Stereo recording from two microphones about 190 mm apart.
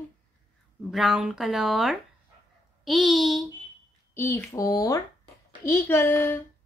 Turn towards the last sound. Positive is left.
turn(degrees=10)  # may be behind; listen again after turning